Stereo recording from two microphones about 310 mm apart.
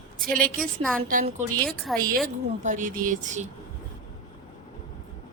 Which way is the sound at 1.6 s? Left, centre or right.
Centre.